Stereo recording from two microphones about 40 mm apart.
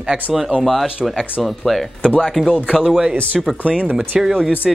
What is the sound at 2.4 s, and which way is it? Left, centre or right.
Speech, centre.